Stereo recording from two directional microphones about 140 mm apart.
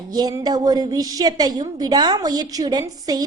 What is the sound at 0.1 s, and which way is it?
A woman's voice, 25° right (ahead or behind).